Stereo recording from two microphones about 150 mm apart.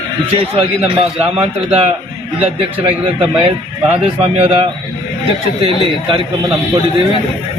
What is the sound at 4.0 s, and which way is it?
A man's voice, 45° right (ahead or behind).